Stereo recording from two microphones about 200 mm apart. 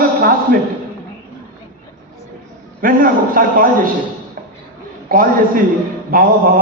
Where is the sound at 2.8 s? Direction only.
45° right (ahead or behind).